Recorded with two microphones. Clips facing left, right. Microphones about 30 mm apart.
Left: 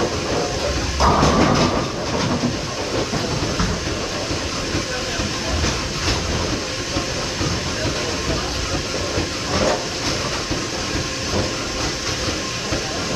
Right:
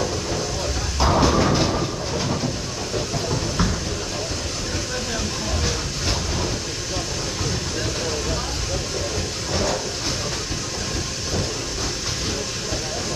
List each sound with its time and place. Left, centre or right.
0.9 s a sound: centre
1.4 s train: left
9.5 s train: left